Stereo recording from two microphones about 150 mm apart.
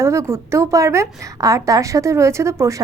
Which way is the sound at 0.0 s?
20° right (ahead or behind).